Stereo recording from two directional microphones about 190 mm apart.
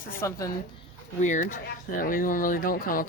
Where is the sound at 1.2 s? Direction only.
40° left (ahead or behind).